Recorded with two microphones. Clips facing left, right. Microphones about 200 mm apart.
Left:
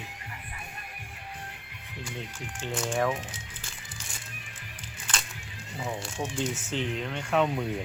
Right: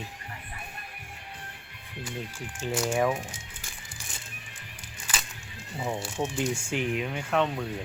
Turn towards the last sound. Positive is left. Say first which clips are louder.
# left 1 dB
turn(degrees=0)  # may be behind; listen again after turning